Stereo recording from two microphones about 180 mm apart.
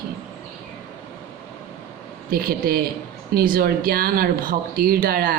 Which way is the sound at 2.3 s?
55° right (ahead or behind).